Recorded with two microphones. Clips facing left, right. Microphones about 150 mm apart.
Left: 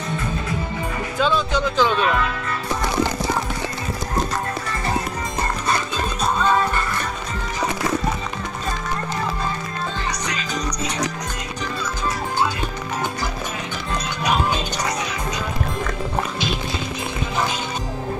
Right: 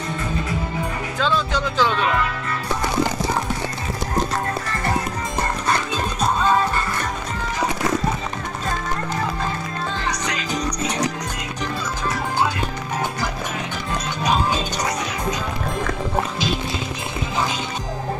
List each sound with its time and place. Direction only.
1.2 s speech: 5° left (ahead or behind)